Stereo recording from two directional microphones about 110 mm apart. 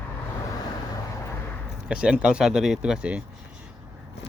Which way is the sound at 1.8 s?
10° right (ahead or behind).